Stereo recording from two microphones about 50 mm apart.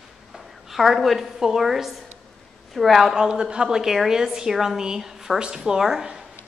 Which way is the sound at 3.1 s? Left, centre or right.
Centre.